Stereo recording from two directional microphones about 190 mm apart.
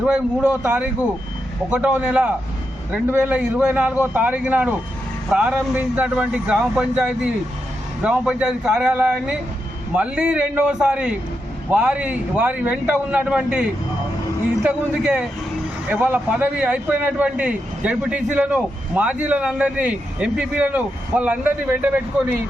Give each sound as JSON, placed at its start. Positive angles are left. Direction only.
{"t": 0.0, "sound": "a man's voice", "side_deg": -5}